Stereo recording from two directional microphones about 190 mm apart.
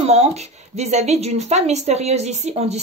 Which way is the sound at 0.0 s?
35° right (ahead or behind).